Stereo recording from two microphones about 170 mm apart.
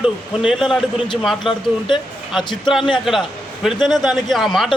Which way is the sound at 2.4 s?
25° left (ahead or behind).